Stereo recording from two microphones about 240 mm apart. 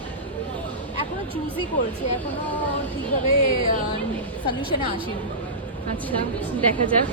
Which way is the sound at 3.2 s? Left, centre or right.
Right.